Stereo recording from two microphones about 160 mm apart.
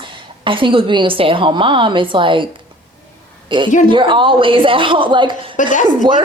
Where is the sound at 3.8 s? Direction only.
30° right (ahead or behind).